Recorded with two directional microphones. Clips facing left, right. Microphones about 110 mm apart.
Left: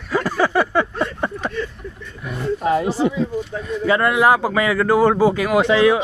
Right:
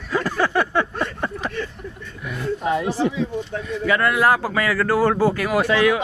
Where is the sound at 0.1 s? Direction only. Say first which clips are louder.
Left 2 dB; 10° left (ahead or behind).